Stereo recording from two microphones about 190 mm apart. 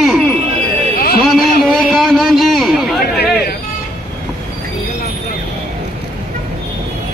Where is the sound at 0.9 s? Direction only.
55° left (ahead or behind).